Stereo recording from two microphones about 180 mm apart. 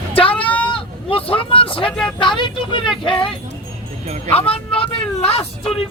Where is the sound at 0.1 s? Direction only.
30° left (ahead or behind).